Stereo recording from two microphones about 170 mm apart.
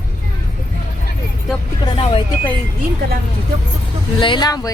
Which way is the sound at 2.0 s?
30° left (ahead or behind).